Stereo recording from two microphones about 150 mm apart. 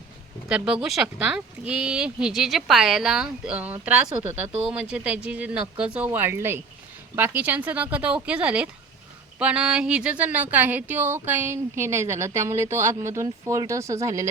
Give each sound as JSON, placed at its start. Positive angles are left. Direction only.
{"t": 0.4, "sound": "speech", "side_deg": -5}